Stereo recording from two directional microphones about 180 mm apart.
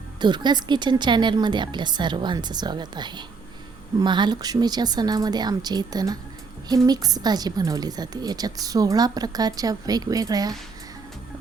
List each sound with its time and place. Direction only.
0.2 s a woman's voice: 25° right (ahead or behind)